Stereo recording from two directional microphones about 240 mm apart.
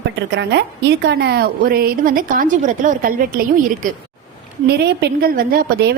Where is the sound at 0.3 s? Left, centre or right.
Right.